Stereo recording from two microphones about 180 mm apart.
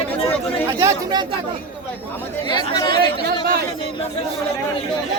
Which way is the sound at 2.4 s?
25° left (ahead or behind).